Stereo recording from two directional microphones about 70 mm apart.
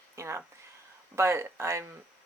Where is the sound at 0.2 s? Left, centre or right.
Right.